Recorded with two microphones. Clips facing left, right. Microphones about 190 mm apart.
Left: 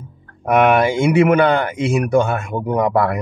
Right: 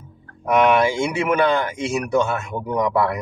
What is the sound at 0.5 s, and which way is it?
Speech, 60° left (ahead or behind).